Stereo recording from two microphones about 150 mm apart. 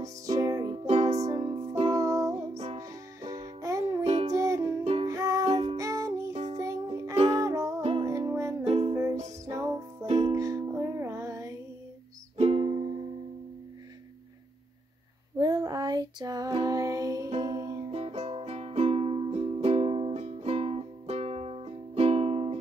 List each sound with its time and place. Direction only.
0.0 s music: 25° right (ahead or behind)
0.8 s music: 45° right (ahead or behind)
1.3 s music: 25° right (ahead or behind)
2.3 s music: 45° right (ahead or behind)
2.8 s music: 20° right (ahead or behind)
4.0 s music: 45° right (ahead or behind)
4.3 s music: 20° right (ahead or behind)
5.5 s music: 45° right (ahead or behind)
5.8 s music: 20° right (ahead or behind)
8.6 s music: 40° right (ahead or behind)
8.9 s music: 20° right (ahead or behind)
12.4 s music: 40° right (ahead or behind)
15.3 s music: 25° right (ahead or behind)
17.9 s music: 45° right (ahead or behind)